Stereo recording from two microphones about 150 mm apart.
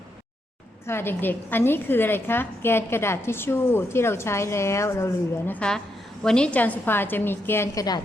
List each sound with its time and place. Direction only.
0.9 s a woman's voice: 15° left (ahead or behind)
5.5 s a woman's voice: 5° left (ahead or behind); by 8.0 s 25° left (ahead or behind)